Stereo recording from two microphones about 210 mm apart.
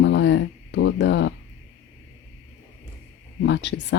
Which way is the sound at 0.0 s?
55° left (ahead or behind).